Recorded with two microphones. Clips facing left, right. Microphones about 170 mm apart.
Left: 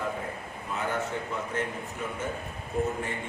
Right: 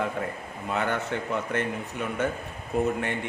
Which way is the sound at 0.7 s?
75° right (ahead or behind).